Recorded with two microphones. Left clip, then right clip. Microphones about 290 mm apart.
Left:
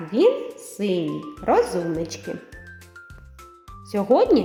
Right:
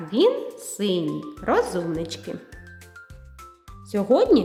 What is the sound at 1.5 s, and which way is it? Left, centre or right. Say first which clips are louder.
Speech: left 2 dB; centre.